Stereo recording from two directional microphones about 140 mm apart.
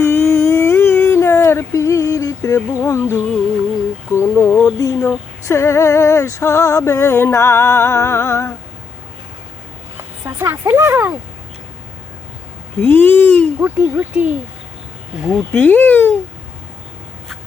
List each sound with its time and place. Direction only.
0.0 s a sound: 15° left (ahead or behind)
4.8 s female singing: 20° left (ahead or behind)
10.2 s a sound: 15° right (ahead or behind)
12.8 s speech: 15° left (ahead or behind)
13.6 s speech: 15° right (ahead or behind)
15.5 s speech: 10° left (ahead or behind)